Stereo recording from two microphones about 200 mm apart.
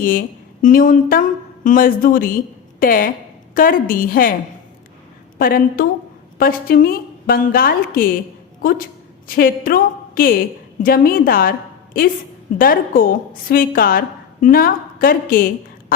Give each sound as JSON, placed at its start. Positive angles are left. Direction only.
{"t": 0.0, "sound": "a woman's voice", "side_deg": 45}
{"t": 5.4, "sound": "a woman's voice", "side_deg": 45}